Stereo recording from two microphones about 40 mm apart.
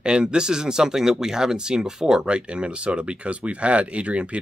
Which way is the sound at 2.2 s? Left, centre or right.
Right.